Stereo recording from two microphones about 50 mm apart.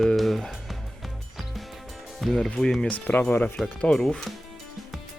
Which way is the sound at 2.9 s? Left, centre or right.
Left.